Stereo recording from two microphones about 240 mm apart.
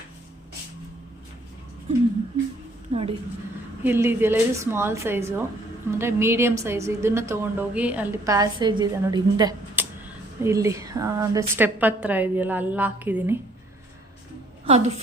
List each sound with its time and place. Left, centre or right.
2.9 s a woman's voice: right
3.8 s a woman's voice: centre
14.7 s a woman's voice: right